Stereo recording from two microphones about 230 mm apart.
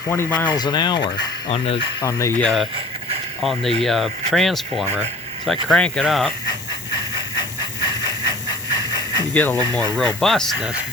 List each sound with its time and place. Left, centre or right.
0.1 s speech: centre
3.4 s speech: centre
6.5 s hiss: centre
9.3 s speech: centre
10.2 s speech: centre